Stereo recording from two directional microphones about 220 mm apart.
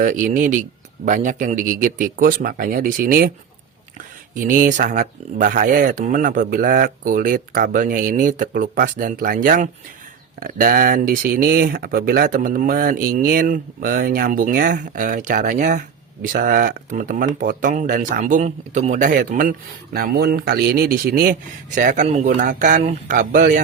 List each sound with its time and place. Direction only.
0.0 s speech: 40° right (ahead or behind)
4.4 s speech: 35° right (ahead or behind)